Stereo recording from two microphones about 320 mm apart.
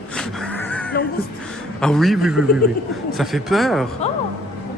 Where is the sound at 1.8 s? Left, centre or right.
Centre.